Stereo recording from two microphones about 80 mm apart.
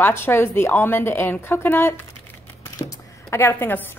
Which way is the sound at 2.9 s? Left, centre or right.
Left.